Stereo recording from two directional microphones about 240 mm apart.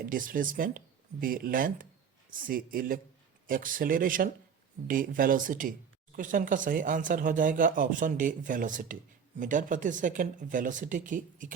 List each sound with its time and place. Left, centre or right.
0.0 s speech: right